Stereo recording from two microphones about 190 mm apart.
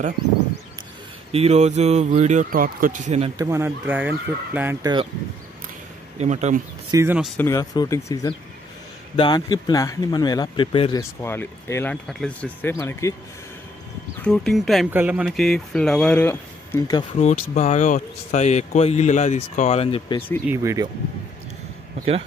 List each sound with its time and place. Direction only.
1.3 s speech: 35° right (ahead or behind)
3.3 s speech: 15° right (ahead or behind)
6.1 s speech: 35° right (ahead or behind)
6.9 s speech: 15° right (ahead or behind)
7.3 s speech: 15° left (ahead or behind)
11.0 s speech: 15° left (ahead or behind)
14.2 s speech: 5° left (ahead or behind)
14.9 s speech: 10° right (ahead or behind); by 17.0 s 15° left (ahead or behind)
17.2 s speech: 35° left (ahead or behind)
20.4 s speech: 15° right (ahead or behind)